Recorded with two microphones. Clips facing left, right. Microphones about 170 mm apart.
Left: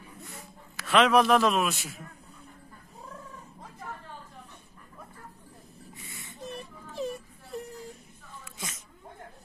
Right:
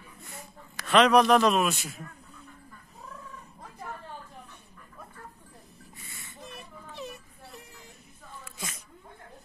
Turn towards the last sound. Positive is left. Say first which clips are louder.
# left 9 dB
turn(degrees=35)  # may be behind; listen again after turning